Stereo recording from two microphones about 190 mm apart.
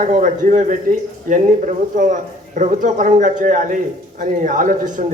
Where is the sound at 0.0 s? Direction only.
40° right (ahead or behind).